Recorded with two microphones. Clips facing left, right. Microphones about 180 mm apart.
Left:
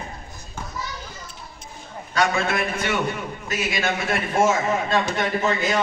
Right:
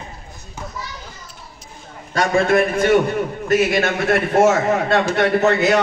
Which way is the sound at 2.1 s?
45° right (ahead or behind).